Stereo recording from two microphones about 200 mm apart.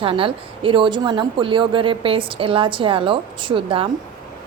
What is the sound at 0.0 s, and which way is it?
Speech, 25° right (ahead or behind).